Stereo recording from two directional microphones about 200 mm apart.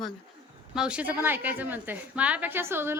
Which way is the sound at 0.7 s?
5° right (ahead or behind).